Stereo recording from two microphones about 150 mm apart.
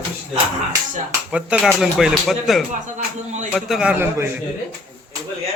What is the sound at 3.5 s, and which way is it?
Speech, 5° right (ahead or behind).